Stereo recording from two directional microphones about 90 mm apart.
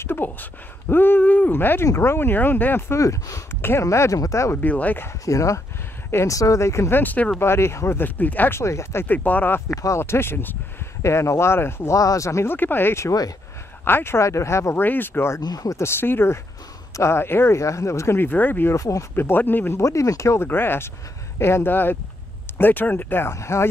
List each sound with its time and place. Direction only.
0.0 s speech: 25° left (ahead or behind)
3.0 s speech: 35° left (ahead or behind)
4.6 s speech: 15° left (ahead or behind)
5.2 s speech: 35° left (ahead or behind)
7.0 s speech: 20° left (ahead or behind)
9.0 s speech: 20° left (ahead or behind)
9.8 s speech: 35° left (ahead or behind)
12.0 s speech: 40° left (ahead or behind)
15.4 s speech: 45° left (ahead or behind)
15.8 s speech: 25° left (ahead or behind)
18.8 s speech: 35° left (ahead or behind)
19.1 s speech: 25° left (ahead or behind)
19.8 s speech: 35° left (ahead or behind)
20.4 s speech: 25° left (ahead or behind)